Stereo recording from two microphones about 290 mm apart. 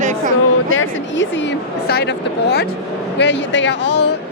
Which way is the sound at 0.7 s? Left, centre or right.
Left.